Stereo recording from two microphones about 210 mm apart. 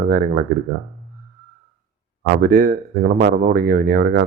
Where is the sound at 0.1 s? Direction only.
45° right (ahead or behind).